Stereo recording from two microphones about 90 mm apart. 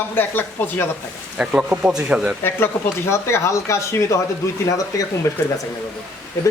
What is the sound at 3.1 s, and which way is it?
A man's voice, 30° left (ahead or behind).